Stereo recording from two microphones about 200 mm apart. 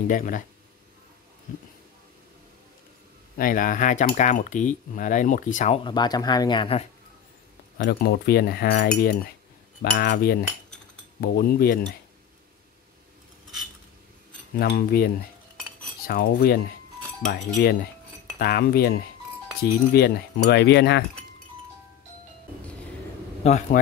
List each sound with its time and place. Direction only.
0.1 s speech: 40° left (ahead or behind)
3.3 s speech: 45° left (ahead or behind)
5.9 s speech: 20° left (ahead or behind)
7.7 s cutlery: 55° left (ahead or behind)
14.6 s cutlery: 50° left (ahead or behind)
16.1 s cutlery: 50° left (ahead or behind)
17.4 s speech: 40° left (ahead or behind)
18.4 s cutlery: 50° left (ahead or behind)
19.9 s speech: 55° left (ahead or behind)
23.4 s speech: 35° left (ahead or behind)